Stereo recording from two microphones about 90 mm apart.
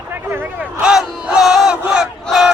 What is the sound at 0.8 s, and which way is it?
Battle cry, 10° right (ahead or behind).